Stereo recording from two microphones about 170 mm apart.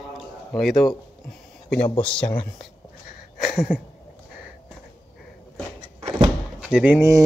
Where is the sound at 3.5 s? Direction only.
5° right (ahead or behind).